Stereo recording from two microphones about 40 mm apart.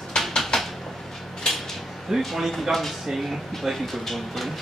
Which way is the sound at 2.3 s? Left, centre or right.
Centre.